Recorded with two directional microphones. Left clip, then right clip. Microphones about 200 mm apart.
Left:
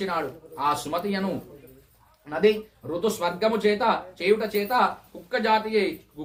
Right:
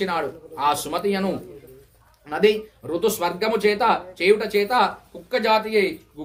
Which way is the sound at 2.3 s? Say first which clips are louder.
Right 3 dB; 45° right (ahead or behind).